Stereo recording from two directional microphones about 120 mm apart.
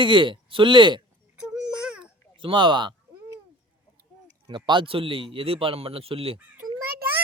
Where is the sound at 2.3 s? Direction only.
45° right (ahead or behind).